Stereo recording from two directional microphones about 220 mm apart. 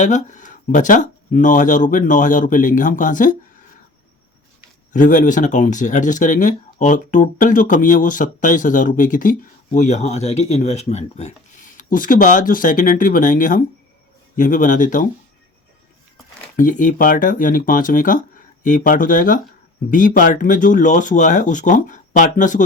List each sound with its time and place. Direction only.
0.0 s speech: 35° left (ahead or behind)
4.9 s speech: 35° left (ahead or behind)
16.6 s speech: 35° left (ahead or behind)